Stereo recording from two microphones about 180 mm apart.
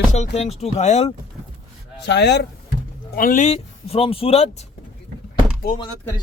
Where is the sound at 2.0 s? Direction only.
70° left (ahead or behind).